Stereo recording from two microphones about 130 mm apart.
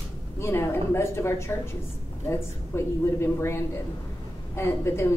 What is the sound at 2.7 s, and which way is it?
A woman's voice, 20° left (ahead or behind).